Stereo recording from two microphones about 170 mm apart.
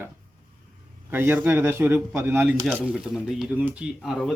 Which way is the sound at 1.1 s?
10° right (ahead or behind).